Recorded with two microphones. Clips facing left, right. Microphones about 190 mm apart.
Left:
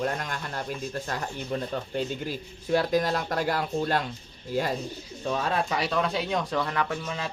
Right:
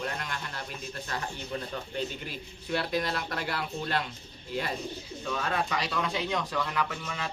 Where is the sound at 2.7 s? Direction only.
40° left (ahead or behind).